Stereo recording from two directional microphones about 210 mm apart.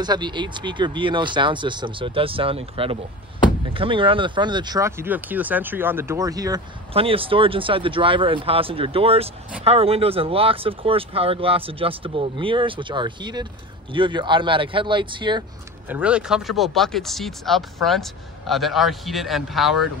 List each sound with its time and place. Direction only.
0.0 s speech: 20° right (ahead or behind)
15.9 s speech: 5° right (ahead or behind)